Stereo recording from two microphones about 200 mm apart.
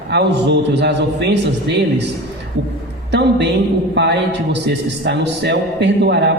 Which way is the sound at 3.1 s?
60° right (ahead or behind).